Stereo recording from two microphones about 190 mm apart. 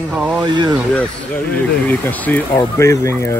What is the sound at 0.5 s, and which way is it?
Speech, 25° right (ahead or behind).